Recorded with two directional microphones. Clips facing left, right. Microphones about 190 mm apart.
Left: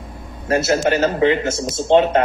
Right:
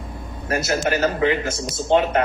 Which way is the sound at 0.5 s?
25° left (ahead or behind).